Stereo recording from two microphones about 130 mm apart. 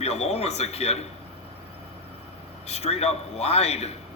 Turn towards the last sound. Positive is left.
turn(degrees=55)  # may be behind; listen again after turning